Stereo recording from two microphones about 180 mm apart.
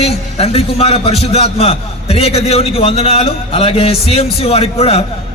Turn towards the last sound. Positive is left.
turn(degrees=35)  # may be behind; listen again after turning